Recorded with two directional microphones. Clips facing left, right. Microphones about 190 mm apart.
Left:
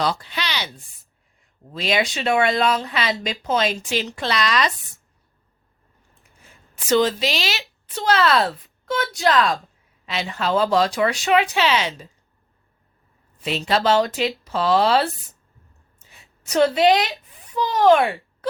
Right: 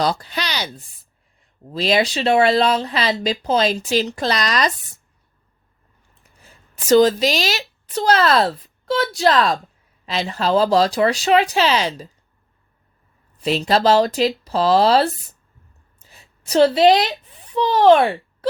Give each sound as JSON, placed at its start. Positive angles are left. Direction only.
{"t": 0.0, "sound": "speech", "side_deg": -40}
{"t": 6.4, "sound": "speech", "side_deg": -35}
{"t": 13.4, "sound": "speech", "side_deg": -35}
{"t": 16.0, "sound": "a sound", "side_deg": -35}
{"t": 17.4, "sound": "a child's voice", "side_deg": -30}